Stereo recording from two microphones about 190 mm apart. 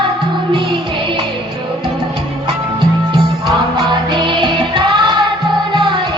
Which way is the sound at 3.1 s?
20° right (ahead or behind).